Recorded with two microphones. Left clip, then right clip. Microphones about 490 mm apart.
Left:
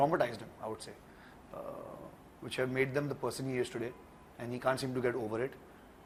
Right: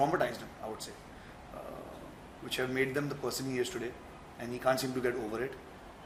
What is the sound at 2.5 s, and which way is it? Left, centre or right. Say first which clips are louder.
A man's voice: right 1 dB; left.